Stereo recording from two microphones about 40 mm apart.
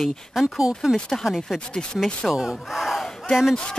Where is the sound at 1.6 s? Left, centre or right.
Left.